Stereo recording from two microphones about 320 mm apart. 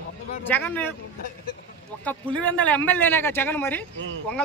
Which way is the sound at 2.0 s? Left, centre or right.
Centre.